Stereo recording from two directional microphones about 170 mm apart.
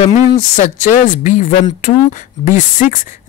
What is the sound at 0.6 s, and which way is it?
Speech, 45° left (ahead or behind).